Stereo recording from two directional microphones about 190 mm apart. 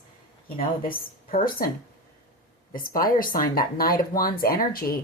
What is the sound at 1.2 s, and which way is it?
Speech, 50° left (ahead or behind).